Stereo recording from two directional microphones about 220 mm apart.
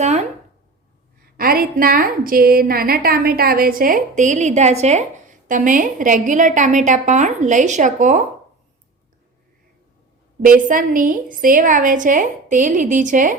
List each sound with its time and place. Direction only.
0.0 s a woman's voice: 30° right (ahead or behind)
1.4 s a woman's voice: 40° right (ahead or behind)
10.4 s a woman's voice: 40° right (ahead or behind)